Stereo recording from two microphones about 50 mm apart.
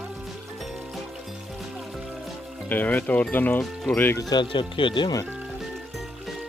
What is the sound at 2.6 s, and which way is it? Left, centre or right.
Speech, left.